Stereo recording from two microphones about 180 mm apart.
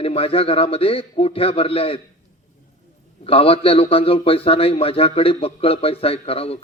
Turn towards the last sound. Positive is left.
turn(degrees=30)  # may be behind; listen again after turning